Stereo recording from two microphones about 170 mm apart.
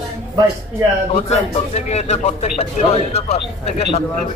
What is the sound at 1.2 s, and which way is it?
Speech, 40° left (ahead or behind).